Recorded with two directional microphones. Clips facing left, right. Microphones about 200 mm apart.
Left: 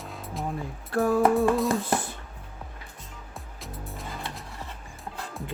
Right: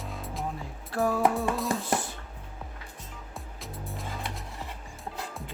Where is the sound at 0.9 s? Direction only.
55° left (ahead or behind).